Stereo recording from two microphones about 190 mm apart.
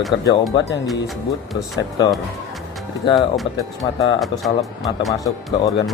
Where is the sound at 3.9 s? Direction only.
25° left (ahead or behind).